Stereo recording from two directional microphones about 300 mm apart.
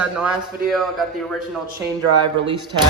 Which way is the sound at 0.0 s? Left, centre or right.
Centre.